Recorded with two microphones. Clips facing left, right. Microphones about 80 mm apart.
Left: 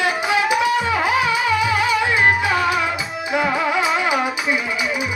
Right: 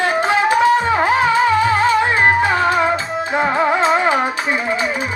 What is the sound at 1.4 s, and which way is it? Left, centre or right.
Music, right.